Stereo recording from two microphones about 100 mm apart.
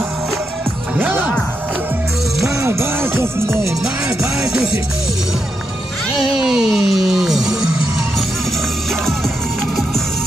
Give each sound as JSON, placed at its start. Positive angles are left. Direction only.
{"t": 0.9, "sound": "music", "side_deg": -15}
{"t": 2.6, "sound": "music", "side_deg": -25}
{"t": 6.1, "sound": "music", "side_deg": -5}